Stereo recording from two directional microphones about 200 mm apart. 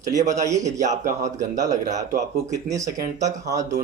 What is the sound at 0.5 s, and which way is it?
Speech, 35° right (ahead or behind).